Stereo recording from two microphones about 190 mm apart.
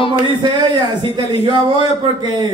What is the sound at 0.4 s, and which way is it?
Speech, 25° right (ahead or behind).